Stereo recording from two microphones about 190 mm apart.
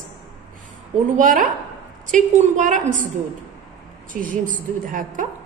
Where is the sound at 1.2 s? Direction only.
45° right (ahead or behind).